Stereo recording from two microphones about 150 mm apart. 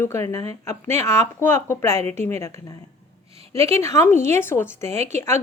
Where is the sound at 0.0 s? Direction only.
20° left (ahead or behind).